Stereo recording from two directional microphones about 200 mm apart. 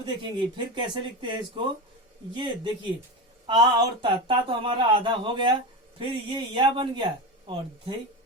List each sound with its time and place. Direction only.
0.0 s speech: 25° right (ahead or behind)